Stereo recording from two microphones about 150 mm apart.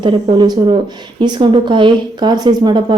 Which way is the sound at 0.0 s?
30° right (ahead or behind).